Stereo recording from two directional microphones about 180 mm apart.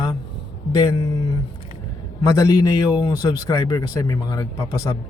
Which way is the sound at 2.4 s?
20° left (ahead or behind).